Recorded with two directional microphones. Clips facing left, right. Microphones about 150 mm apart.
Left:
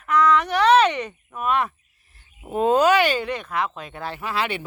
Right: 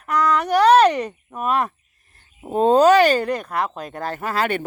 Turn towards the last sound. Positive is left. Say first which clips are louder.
# right 4 dB
turn(degrees=-45)  # may be behind; listen again after turning